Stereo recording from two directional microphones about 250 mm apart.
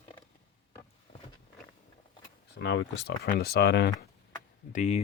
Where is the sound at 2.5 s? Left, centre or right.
Left.